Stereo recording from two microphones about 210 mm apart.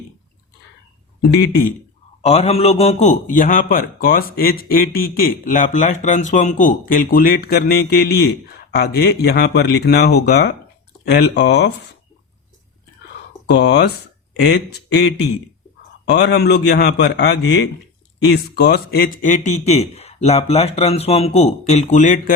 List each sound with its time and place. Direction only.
2.2 s a man's voice: 30° left (ahead or behind); by 11.7 s 55° left (ahead or behind)
13.5 s a man's voice: 55° left (ahead or behind)
16.0 s a man's voice: 50° left (ahead or behind)